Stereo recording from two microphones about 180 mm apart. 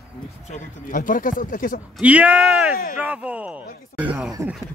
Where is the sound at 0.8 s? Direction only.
50° left (ahead or behind).